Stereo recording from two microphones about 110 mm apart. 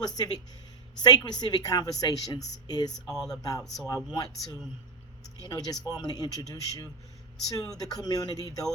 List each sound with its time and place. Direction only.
0.0 s a woman's voice: 35° left (ahead or behind)
3.2 s speech: 5° left (ahead or behind)
3.8 s a woman's voice: 35° left (ahead or behind)